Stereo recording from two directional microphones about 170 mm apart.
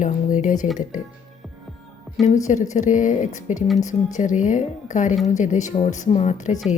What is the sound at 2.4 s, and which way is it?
Speech, 45° left (ahead or behind).